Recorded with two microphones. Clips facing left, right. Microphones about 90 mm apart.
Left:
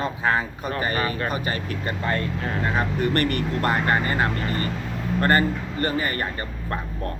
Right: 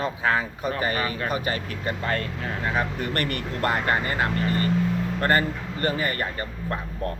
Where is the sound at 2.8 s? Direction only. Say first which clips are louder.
Left 5 dB; 30° left (ahead or behind).